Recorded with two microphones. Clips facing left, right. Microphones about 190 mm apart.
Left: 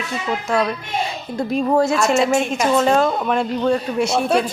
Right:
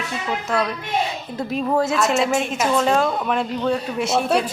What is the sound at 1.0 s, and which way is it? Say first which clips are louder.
A man's voice: left 3 dB; centre (ahead or behind).